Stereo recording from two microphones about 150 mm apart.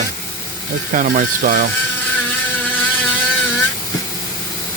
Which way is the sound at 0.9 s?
60° right (ahead or behind).